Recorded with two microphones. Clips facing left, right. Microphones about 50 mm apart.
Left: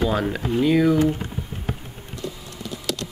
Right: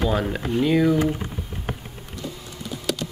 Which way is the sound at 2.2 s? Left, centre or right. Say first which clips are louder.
Left 2 dB; centre.